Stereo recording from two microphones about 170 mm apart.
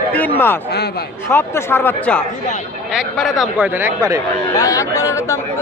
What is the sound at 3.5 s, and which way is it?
Speech, 10° right (ahead or behind).